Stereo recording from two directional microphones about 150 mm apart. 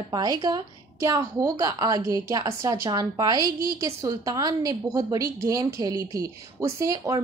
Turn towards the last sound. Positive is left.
turn(degrees=-20)  # may be behind; listen again after turning